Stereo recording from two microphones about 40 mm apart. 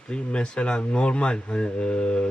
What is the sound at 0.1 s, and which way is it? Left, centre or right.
Speech, left.